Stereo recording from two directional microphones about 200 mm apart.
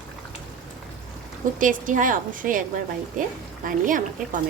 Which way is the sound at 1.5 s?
40° right (ahead or behind).